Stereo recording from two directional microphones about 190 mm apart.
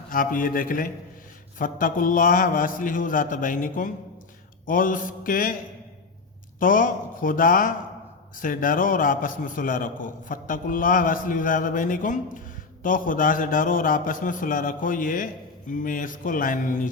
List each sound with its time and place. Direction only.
0.1 s a man's voice: 45° left (ahead or behind)
6.6 s a man's voice: 45° left (ahead or behind)